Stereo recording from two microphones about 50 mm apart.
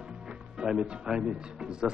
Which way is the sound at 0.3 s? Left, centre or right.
Centre.